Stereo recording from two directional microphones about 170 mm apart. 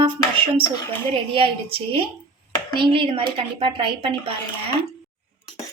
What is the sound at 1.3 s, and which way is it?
Speech, 35° right (ahead or behind).